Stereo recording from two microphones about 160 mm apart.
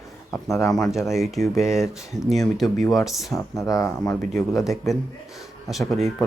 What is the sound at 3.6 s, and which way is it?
Speech, 20° left (ahead or behind).